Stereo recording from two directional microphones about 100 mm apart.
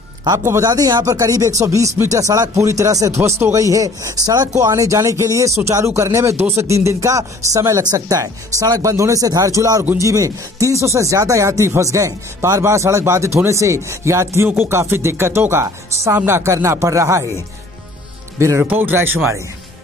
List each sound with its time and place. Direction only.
0.4 s speech: 25° right (ahead or behind)
0.7 s speech: 40° right (ahead or behind)
18.6 s speech: 20° right (ahead or behind)